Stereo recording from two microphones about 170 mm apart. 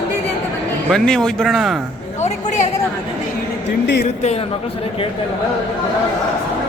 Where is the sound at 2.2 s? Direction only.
45° left (ahead or behind).